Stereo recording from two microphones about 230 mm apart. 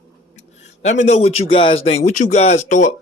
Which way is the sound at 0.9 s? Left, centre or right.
Left.